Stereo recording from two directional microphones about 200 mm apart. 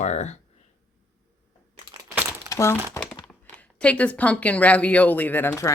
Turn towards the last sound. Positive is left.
turn(degrees=15)  # may be behind; listen again after turning